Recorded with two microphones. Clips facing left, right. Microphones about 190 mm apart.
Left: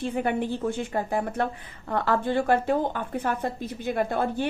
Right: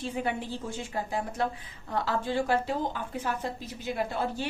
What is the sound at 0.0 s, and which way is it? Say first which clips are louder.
A woman's voice: left 6 dB; 60° left (ahead or behind).